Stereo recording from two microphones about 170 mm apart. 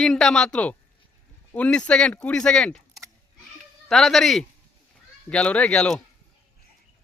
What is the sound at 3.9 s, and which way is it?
Speech, centre (ahead or behind).